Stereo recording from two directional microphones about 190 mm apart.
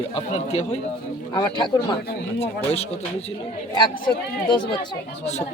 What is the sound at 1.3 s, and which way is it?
Speech, 20° left (ahead or behind).